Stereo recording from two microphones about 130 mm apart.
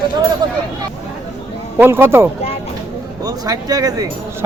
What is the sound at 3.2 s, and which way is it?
Speech, 30° right (ahead or behind).